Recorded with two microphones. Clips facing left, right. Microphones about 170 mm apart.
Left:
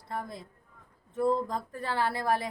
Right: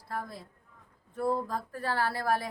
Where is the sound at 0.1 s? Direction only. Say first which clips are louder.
Left 1 dB; 20° left (ahead or behind).